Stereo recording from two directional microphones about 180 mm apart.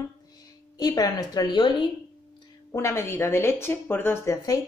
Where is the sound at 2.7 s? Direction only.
15° left (ahead or behind).